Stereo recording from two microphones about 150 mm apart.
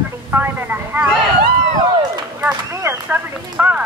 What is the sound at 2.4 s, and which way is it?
Speech, 15° right (ahead or behind).